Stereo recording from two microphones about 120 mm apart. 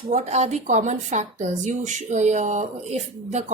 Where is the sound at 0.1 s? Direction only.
65° right (ahead or behind).